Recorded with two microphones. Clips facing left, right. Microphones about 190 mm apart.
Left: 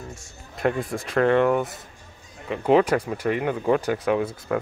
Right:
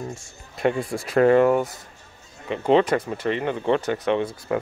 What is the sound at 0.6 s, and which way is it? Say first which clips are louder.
Speech: right 1 dB; centre (ahead or behind).